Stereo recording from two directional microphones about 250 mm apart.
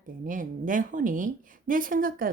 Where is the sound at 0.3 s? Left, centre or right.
Right.